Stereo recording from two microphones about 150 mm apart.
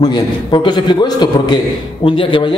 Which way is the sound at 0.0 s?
30° left (ahead or behind).